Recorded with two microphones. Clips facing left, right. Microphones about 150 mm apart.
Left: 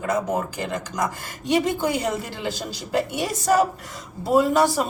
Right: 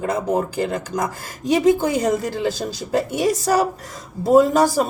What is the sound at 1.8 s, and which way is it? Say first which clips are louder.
A woman's voice: right 4 dB; 40° right (ahead or behind).